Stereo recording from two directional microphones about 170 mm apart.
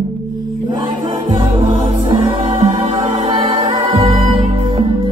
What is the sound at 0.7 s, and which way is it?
Music, 25° right (ahead or behind).